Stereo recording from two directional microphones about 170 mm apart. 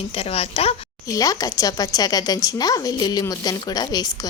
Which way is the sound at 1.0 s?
20° left (ahead or behind).